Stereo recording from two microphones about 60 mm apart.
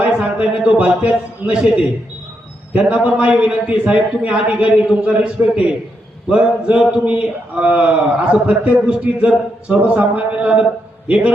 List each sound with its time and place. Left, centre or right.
0.0 s a man's voice: centre
2.7 s speech: right